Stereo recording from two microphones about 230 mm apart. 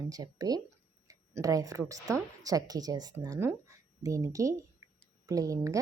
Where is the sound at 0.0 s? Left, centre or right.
Centre.